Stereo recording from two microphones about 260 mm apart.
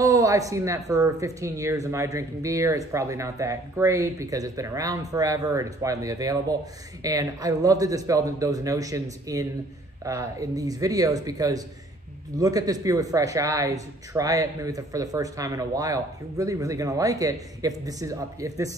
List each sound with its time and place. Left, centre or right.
0.0 s speech: centre